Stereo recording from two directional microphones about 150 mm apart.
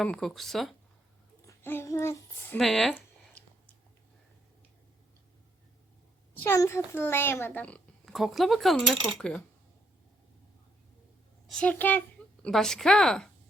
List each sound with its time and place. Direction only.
0.0 s speech: 5° left (ahead or behind)
1.5 s a child's voice: 15° left (ahead or behind)
2.6 s speech: centre (ahead or behind)
6.4 s a child's voice: 15° left (ahead or behind)
11.4 s a sound: 5° left (ahead or behind)
12.5 s speech: centre (ahead or behind)